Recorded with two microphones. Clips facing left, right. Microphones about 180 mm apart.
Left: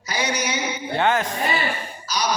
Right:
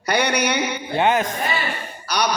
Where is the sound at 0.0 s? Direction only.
65° right (ahead or behind).